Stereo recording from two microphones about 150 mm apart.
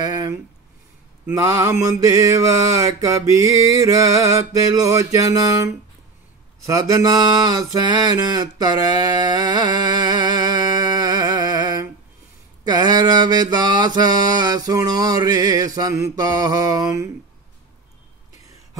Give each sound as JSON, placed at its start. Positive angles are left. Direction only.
{"t": 0.0, "sound": "a sound", "side_deg": -25}
{"t": 1.2, "sound": "mantra", "side_deg": -20}
{"t": 6.7, "sound": "mantra", "side_deg": -25}